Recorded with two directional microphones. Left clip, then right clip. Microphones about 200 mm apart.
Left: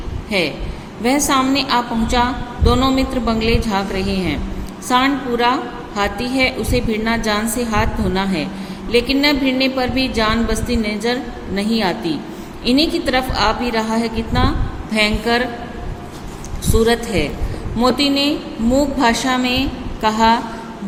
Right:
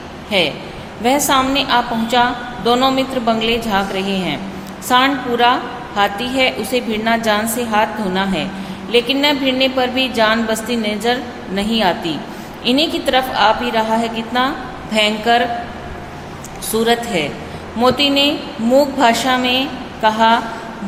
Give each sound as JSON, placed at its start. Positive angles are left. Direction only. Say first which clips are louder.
{"t": 0.3, "sound": "a man's voice", "louder": "right 3 dB", "side_deg": 10}
{"t": 16.6, "sound": "a woman's voice", "louder": "even", "side_deg": 10}